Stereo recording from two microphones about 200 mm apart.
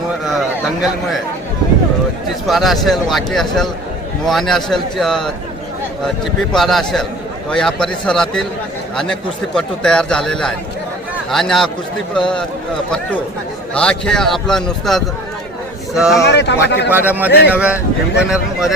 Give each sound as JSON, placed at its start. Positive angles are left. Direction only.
{"t": 0.3, "sound": "a sound", "side_deg": 0}
{"t": 2.5, "sound": "a man's voice", "side_deg": 0}
{"t": 6.5, "sound": "a man's voice", "side_deg": 0}
{"t": 9.6, "sound": "a man's voice", "side_deg": 5}
{"t": 13.7, "sound": "a man's voice", "side_deg": 5}
{"t": 16.2, "sound": "speech", "side_deg": 60}
{"t": 16.9, "sound": "a man's voice", "side_deg": -10}